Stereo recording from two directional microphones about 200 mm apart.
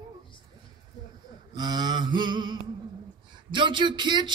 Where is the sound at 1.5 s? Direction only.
20° right (ahead or behind).